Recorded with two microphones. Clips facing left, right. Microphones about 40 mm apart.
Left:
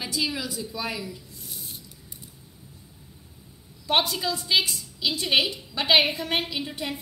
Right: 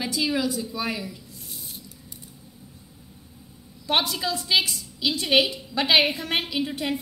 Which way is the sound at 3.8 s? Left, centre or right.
Right.